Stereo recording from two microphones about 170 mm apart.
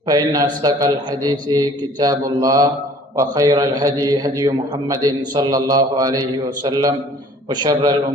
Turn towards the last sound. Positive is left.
turn(degrees=-25)  # may be behind; listen again after turning